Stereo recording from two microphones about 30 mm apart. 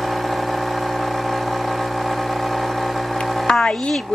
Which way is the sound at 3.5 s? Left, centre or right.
Left.